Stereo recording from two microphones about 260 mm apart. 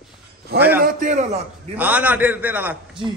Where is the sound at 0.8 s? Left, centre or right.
Right.